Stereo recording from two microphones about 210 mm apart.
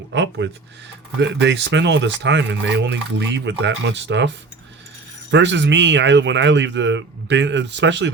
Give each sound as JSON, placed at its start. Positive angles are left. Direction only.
{"t": 0.1, "sound": "speech", "side_deg": -60}
{"t": 5.3, "sound": "speech", "side_deg": -60}